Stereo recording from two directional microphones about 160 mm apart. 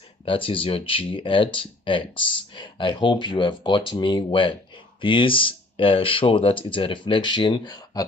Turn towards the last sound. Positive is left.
turn(degrees=25)  # may be behind; listen again after turning